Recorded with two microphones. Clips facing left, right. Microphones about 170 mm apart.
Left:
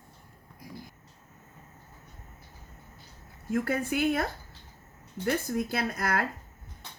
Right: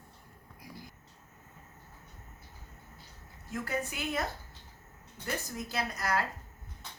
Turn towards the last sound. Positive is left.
turn(degrees=55)  # may be behind; listen again after turning